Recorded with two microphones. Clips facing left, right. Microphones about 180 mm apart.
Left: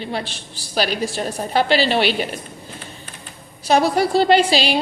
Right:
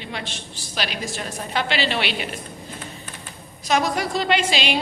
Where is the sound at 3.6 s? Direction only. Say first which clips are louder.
Left 5 dB; 35° left (ahead or behind).